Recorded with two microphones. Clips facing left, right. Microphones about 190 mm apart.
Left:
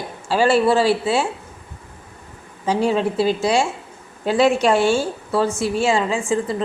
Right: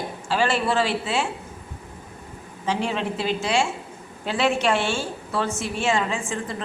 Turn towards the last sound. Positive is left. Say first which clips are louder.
# left 8 dB
turn(degrees=30)  # may be behind; listen again after turning